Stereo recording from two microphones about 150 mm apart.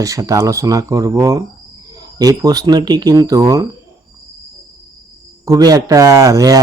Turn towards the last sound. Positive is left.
turn(degrees=-20)  # may be behind; listen again after turning